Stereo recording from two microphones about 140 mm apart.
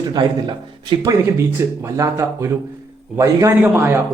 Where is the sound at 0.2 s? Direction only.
30° right (ahead or behind).